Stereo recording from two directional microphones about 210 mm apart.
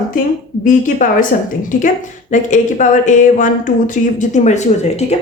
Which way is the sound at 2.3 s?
35° left (ahead or behind).